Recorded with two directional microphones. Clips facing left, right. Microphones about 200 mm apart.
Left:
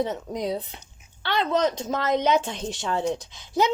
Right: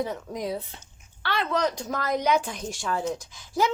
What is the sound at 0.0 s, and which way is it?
A woman's voice, 20° left (ahead or behind).